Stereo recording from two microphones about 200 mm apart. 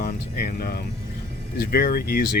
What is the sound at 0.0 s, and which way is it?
Music, 45° left (ahead or behind).